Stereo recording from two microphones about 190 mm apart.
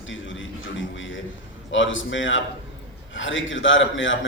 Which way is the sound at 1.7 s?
85° left.